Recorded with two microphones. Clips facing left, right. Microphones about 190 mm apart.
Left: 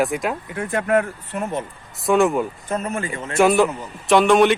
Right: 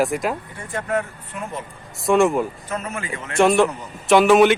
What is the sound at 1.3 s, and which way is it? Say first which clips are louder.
Speech: left 5 dB; 45° left (ahead or behind).